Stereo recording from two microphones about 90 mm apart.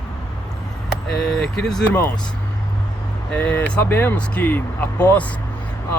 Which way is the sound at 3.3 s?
20° left (ahead or behind).